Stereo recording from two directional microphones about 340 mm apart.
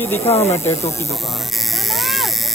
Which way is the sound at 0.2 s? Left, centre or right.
Centre.